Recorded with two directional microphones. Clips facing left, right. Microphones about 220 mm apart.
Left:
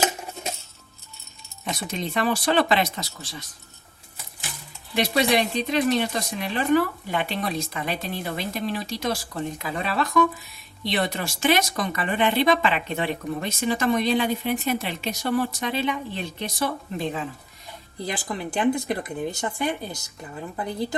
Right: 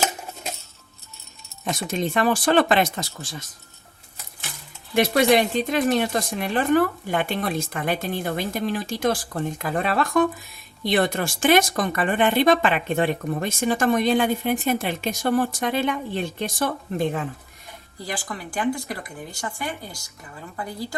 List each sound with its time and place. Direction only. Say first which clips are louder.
1.6 s speech: right 4 dB; 50° right (ahead or behind)
4.9 s speech: right 4 dB; 50° right (ahead or behind)
18.0 s speech: left 2 dB; 20° left (ahead or behind)